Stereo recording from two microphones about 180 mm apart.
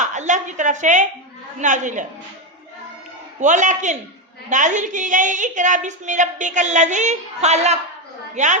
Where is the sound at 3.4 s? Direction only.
45° right (ahead or behind).